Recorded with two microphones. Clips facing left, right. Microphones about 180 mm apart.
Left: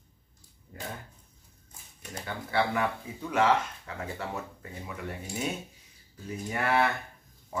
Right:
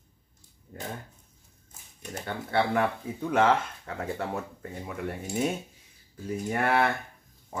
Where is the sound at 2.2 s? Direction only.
50° right (ahead or behind).